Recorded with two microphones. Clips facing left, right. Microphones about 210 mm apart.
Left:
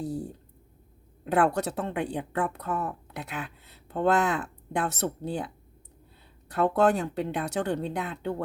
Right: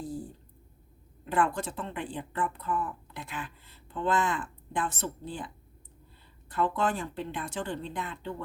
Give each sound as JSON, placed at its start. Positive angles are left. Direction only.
{"t": 0.0, "sound": "a sound", "side_deg": 65}
{"t": 1.2, "sound": "speech", "side_deg": 65}
{"t": 6.7, "sound": "speech", "side_deg": 65}